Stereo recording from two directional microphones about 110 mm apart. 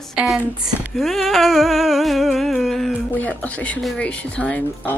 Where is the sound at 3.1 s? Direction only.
15° left (ahead or behind).